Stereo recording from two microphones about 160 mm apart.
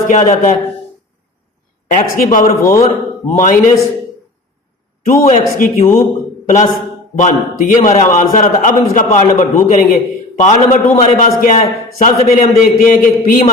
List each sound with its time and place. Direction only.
0.1 s a man's voice: 50° left (ahead or behind)
1.9 s a man's voice: 55° left (ahead or behind)
2.6 s a man's voice: 20° left (ahead or behind)
3.3 s a man's voice: 55° left (ahead or behind)
5.0 s a man's voice: 55° left (ahead or behind)
6.4 s a sound: 45° left (ahead or behind)
7.2 s a man's voice: 55° left (ahead or behind)